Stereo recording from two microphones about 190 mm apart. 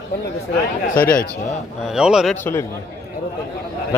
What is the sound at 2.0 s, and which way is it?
Speech, 5° right (ahead or behind).